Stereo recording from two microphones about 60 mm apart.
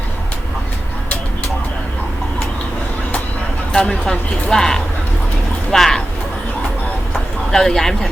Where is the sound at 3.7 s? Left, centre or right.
Centre.